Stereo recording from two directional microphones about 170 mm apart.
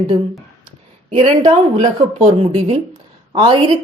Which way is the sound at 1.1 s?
35° right (ahead or behind).